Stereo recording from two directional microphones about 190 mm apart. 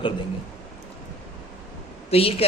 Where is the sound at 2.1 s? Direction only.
30° left (ahead or behind).